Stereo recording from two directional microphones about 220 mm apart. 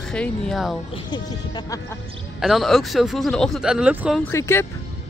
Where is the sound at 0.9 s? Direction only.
20° left (ahead or behind).